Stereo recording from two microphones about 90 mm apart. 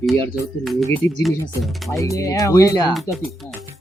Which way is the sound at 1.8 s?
35° left (ahead or behind).